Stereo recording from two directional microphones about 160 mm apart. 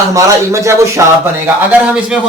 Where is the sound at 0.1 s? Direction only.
20° right (ahead or behind).